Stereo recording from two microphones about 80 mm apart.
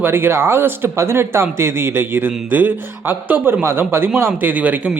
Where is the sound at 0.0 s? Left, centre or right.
Right.